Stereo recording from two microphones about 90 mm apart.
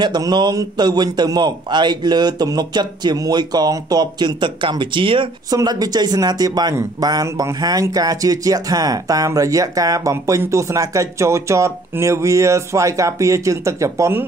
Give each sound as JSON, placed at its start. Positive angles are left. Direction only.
{"t": 0.0, "sound": "a man's voice", "side_deg": -50}
{"t": 5.5, "sound": "a man's voice", "side_deg": -45}
{"t": 7.2, "sound": "speech", "side_deg": -30}
{"t": 7.9, "sound": "speech", "side_deg": -45}